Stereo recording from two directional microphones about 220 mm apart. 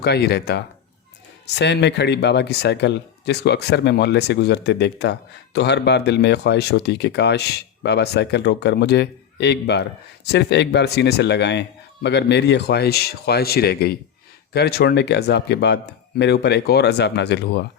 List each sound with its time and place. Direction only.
0.0 s speech: 50° left (ahead or behind)